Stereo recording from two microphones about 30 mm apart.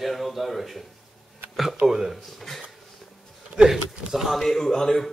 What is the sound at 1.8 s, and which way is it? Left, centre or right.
Speech, centre.